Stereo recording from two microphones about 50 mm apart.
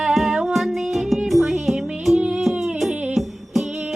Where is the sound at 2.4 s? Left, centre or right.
Centre.